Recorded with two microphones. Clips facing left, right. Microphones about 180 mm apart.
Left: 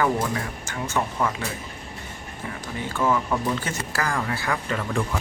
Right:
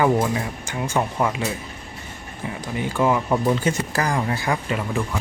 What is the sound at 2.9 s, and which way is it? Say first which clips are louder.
Speech: right 3 dB; 15° right (ahead or behind).